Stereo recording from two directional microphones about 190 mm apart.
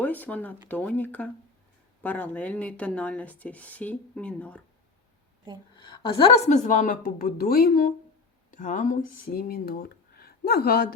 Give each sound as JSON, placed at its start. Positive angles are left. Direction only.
{"t": 0.0, "sound": "speech", "side_deg": 10}
{"t": 5.7, "sound": "a woman's voice", "side_deg": 25}